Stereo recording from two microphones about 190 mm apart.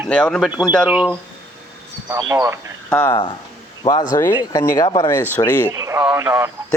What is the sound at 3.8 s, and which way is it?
Speech, 25° left (ahead or behind).